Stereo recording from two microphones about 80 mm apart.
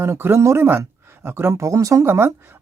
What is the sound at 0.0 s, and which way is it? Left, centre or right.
Speech, right.